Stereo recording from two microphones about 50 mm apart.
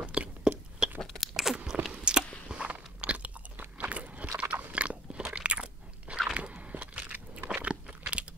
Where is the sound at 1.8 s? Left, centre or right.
Right.